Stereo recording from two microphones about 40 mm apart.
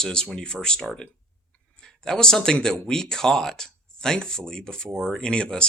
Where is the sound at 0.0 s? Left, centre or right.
Centre.